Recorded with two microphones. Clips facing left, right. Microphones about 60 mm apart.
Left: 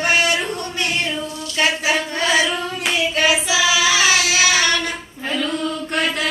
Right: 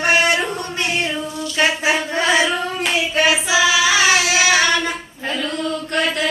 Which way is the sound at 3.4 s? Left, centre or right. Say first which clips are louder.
Right 2 dB; right.